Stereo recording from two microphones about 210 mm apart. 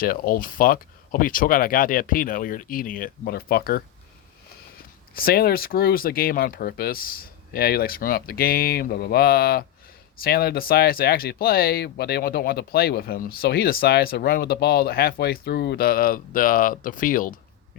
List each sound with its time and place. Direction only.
0.0 s speech: 45° left (ahead or behind)